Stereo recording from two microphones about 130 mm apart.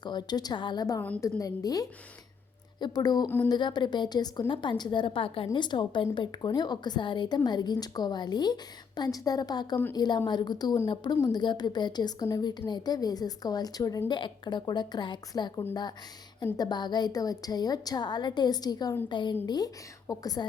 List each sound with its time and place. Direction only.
0.0 s a woman's voice: 35° left (ahead or behind)
3.2 s speech: 15° left (ahead or behind)
3.5 s a woman's voice: 35° left (ahead or behind)